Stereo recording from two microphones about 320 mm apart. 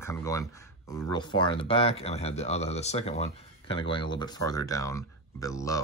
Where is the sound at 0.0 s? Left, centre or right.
Centre.